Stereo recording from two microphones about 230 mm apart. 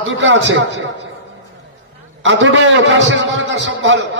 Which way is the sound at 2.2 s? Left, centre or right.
Right.